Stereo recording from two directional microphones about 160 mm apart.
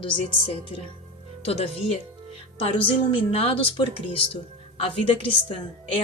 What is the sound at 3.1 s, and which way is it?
A woman's voice, 35° left (ahead or behind).